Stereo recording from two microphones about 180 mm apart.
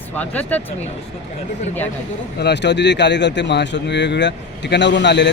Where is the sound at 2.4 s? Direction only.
70° left (ahead or behind).